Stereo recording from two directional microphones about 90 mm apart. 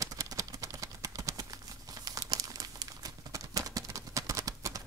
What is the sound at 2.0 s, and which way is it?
Crumpling, 45° right (ahead or behind).